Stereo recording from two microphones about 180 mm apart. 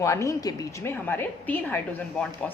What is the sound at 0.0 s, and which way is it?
A woman's voice, 15° left (ahead or behind).